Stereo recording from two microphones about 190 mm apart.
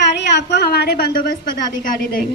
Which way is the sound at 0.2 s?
65° left (ahead or behind).